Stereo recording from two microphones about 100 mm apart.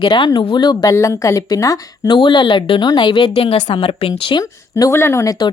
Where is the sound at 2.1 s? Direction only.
50° left (ahead or behind).